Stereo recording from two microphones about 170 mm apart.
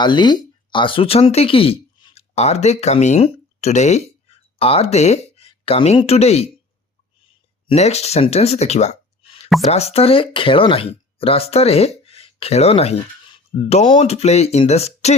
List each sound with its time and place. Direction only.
0.0 s speech: 25° left (ahead or behind)
7.7 s speech: 40° left (ahead or behind)